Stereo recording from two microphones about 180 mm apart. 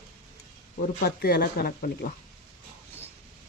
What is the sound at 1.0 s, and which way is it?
Speech, 60° left (ahead or behind).